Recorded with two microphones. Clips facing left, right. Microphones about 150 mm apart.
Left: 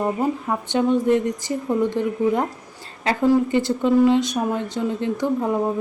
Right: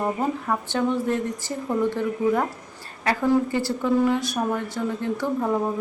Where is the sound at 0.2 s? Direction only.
15° left (ahead or behind).